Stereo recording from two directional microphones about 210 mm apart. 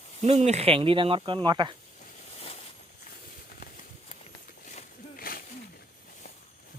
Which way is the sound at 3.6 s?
40° left (ahead or behind).